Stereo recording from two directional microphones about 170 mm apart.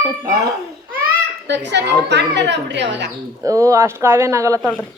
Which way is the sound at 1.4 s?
90° right.